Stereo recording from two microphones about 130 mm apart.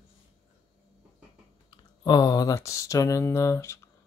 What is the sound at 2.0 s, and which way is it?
Speech, 30° left (ahead or behind).